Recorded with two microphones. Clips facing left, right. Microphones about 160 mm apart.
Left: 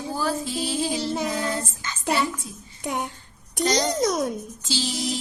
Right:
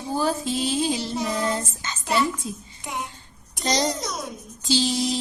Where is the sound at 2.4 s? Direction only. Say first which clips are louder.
Right 7 dB; 90° right.